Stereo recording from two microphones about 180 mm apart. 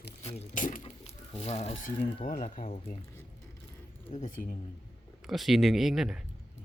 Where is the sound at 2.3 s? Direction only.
45° left (ahead or behind).